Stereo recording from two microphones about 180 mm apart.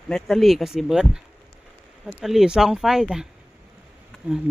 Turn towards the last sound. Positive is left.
turn(degrees=5)  # may be behind; listen again after turning